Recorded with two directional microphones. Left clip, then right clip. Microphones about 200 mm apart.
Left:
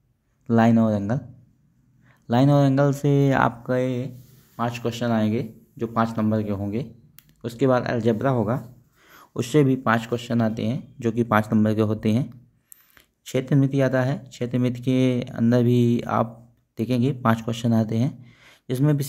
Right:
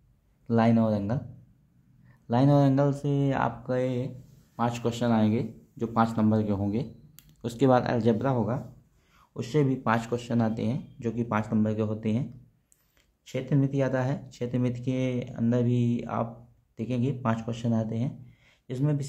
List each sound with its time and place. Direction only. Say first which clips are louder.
0.5 s a man's voice: left 5 dB; 20° left (ahead or behind)
9.1 s a man's voice: left 7 dB; 35° left (ahead or behind); by 10.8 s 15° left (ahead or behind)
11.0 s speech: left 9 dB; 25° left (ahead or behind)